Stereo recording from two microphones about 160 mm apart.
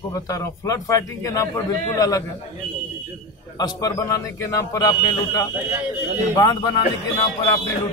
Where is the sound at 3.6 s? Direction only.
25° left (ahead or behind).